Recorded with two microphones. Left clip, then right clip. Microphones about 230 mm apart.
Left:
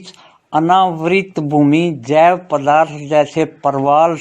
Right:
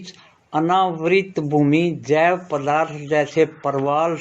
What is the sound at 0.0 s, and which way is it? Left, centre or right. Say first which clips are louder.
Speech: left 3 dB; left.